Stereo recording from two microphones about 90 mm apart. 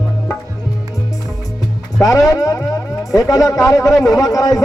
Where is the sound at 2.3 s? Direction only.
35° left (ahead or behind).